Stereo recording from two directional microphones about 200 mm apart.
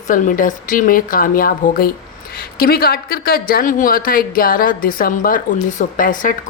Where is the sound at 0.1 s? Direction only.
40° left (ahead or behind).